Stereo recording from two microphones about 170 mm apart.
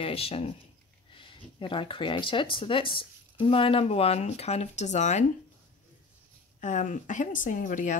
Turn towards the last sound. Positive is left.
turn(degrees=50)  # may be behind; listen again after turning